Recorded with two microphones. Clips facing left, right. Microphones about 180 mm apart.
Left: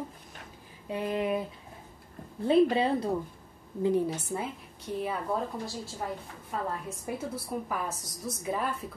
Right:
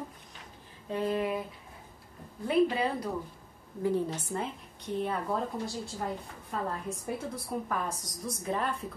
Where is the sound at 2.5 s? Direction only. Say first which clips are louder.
Left 4 dB; 25° left (ahead or behind).